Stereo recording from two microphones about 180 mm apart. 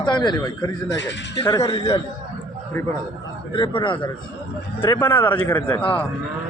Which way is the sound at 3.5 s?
30° left (ahead or behind).